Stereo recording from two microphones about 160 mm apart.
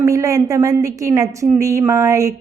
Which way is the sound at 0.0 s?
20° right (ahead or behind).